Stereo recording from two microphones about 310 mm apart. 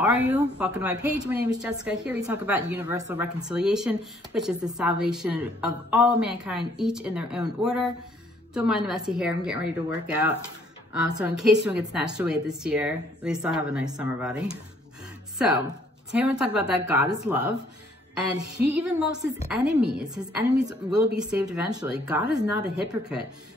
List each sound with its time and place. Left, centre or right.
0.0 s a woman's voice: centre
19.5 s a woman's voice: centre